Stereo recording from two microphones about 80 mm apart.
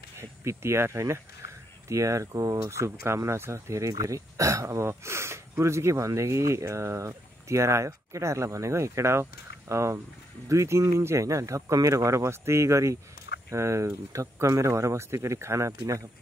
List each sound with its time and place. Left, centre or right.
0.2 s speech: right